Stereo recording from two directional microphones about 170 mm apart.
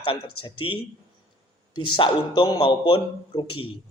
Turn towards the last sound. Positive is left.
turn(degrees=30)  # may be behind; listen again after turning